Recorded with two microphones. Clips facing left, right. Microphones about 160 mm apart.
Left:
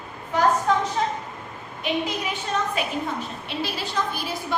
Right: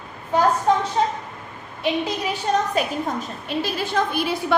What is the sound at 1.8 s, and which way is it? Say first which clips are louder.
A woman's voice: right 3 dB; 35° right (ahead or behind).